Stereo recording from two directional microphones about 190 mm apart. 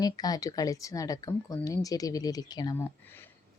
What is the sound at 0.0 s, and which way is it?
Speech, 20° left (ahead or behind).